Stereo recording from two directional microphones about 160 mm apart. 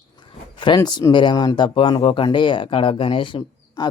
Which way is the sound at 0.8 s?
20° left (ahead or behind).